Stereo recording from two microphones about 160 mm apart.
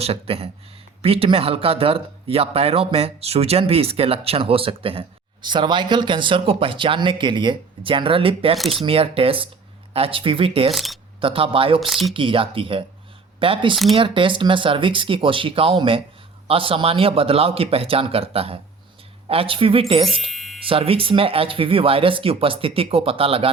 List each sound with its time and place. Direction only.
0.0 s speech: 40° right (ahead or behind)
8.5 s speech: centre (ahead or behind)
8.8 s speech: 35° right (ahead or behind)
10.7 s speech: centre (ahead or behind)
11.2 s speech: 35° right (ahead or behind)
11.8 s speech: centre (ahead or behind)
12.1 s speech: 35° right (ahead or behind)
20.1 s music: centre (ahead or behind)
20.7 s speech: 35° right (ahead or behind)